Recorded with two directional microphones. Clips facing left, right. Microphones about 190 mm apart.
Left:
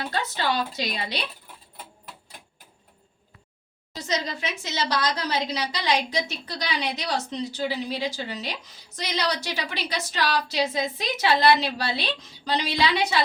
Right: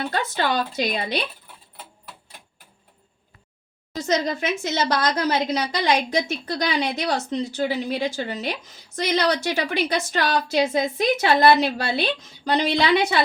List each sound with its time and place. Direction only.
0.1 s a woman's voice: 50° right (ahead or behind)
4.0 s a woman's voice: 50° right (ahead or behind)